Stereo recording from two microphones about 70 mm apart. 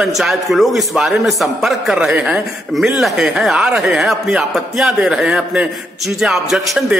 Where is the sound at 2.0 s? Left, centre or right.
Centre.